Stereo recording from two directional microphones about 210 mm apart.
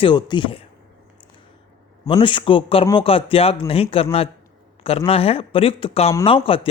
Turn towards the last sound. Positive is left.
turn(degrees=25)  # may be behind; listen again after turning